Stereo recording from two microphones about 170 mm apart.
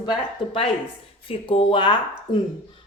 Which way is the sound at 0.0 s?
25° left (ahead or behind).